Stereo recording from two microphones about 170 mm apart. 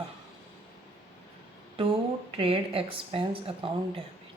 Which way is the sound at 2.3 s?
35° right (ahead or behind).